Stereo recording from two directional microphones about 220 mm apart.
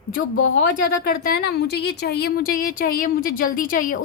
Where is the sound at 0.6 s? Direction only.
40° left (ahead or behind).